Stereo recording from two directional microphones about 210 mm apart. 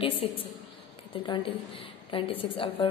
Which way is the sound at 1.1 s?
25° left (ahead or behind).